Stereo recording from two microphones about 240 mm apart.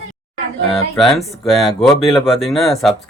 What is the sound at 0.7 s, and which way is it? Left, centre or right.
Speech, centre.